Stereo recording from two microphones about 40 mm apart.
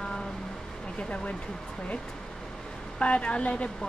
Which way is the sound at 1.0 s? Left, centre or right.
Left.